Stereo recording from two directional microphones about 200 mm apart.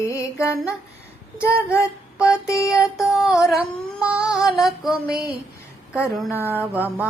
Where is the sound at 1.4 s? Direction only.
5° right (ahead or behind).